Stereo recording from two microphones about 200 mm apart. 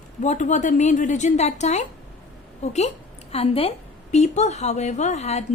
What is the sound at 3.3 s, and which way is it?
A woman's voice, 30° left (ahead or behind).